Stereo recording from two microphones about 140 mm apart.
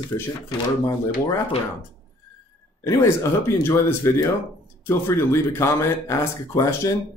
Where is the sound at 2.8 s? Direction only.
20° left (ahead or behind).